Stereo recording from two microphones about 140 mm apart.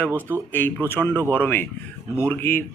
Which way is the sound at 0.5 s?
15° left (ahead or behind).